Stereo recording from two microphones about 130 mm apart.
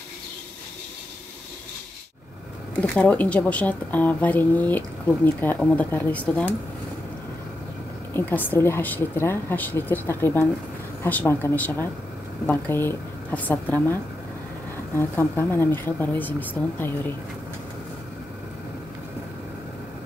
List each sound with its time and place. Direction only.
2.7 s speech: 10° left (ahead or behind)
8.1 s speech: 15° left (ahead or behind)
15.0 s speech: 15° left (ahead or behind)